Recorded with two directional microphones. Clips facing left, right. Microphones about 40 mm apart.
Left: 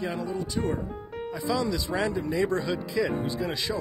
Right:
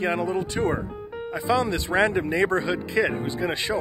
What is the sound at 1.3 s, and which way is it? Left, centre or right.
Speech, right.